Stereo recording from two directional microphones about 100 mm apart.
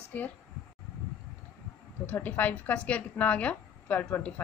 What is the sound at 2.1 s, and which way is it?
A woman's voice, 15° left (ahead or behind).